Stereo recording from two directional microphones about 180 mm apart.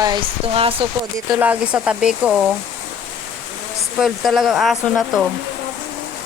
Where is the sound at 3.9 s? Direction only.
Centre (ahead or behind).